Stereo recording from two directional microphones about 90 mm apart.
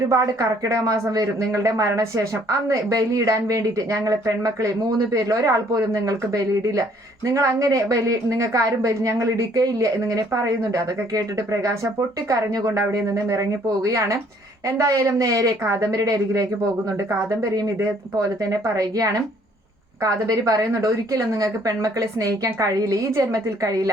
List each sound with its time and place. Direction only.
0.1 s a woman's voice: 40° right (ahead or behind)
18.4 s a woman's voice: 40° right (ahead or behind)